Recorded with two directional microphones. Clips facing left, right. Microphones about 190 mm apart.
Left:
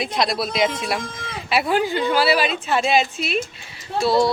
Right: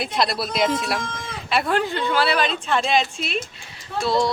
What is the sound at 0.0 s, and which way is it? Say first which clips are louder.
A woman's voice: left 1 dB; centre (ahead or behind).